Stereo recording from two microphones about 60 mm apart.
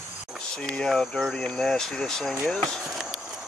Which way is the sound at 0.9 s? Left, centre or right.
Centre.